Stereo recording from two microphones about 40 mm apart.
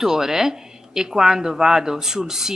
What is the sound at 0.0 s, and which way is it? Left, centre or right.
Speech, centre.